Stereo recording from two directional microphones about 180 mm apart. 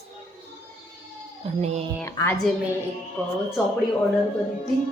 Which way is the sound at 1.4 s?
35° right (ahead or behind).